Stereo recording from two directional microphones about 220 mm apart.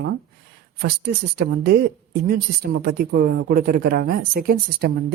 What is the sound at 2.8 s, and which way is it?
Speech, 45° right (ahead or behind).